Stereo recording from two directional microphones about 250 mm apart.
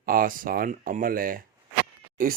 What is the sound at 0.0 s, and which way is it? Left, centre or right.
Speech, right.